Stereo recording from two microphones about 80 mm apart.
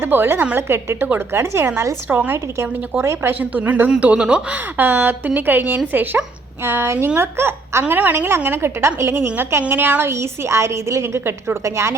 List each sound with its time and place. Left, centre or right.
0.0 s a woman's voice: right
3.4 s a woman's voice: right
10.1 s a woman's voice: right